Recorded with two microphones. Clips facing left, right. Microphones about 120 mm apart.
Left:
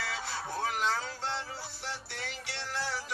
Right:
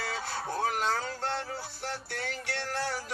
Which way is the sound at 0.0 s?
45° right (ahead or behind).